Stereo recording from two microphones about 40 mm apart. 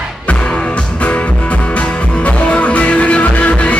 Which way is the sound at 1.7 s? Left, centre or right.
Left.